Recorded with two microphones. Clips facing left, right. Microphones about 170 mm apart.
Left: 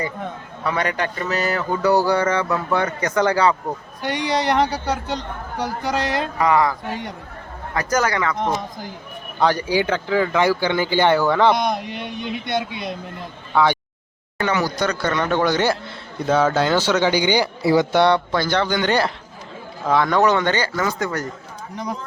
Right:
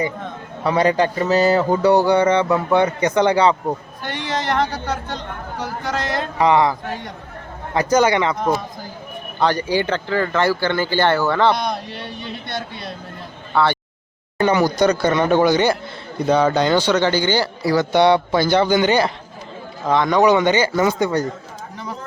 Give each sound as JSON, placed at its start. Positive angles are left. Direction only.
{"t": 0.6, "sound": "speech", "side_deg": -30}
{"t": 4.0, "sound": "a man's voice", "side_deg": 15}
{"t": 6.4, "sound": "speech", "side_deg": -25}
{"t": 9.4, "sound": "a man's voice", "side_deg": 10}
{"t": 14.3, "sound": "speech", "side_deg": -20}
{"t": 15.5, "sound": "a man's voice", "side_deg": 0}
{"t": 17.9, "sound": "speech", "side_deg": -5}
{"t": 20.1, "sound": "speech", "side_deg": -15}